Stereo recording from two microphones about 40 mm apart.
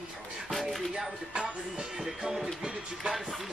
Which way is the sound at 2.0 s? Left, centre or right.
Centre.